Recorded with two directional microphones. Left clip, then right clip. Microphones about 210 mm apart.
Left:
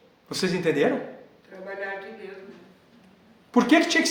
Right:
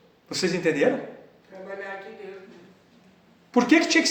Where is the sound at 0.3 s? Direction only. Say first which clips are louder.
Right 1 dB; 20° left (ahead or behind).